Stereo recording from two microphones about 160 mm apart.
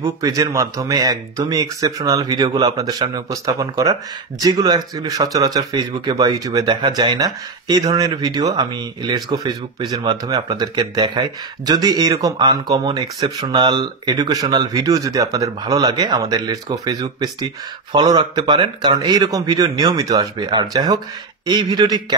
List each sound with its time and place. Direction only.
0.0 s speech: 20° right (ahead or behind)